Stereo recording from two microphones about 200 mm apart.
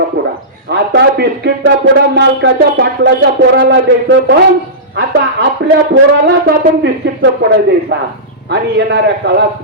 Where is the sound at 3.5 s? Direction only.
60° right (ahead or behind).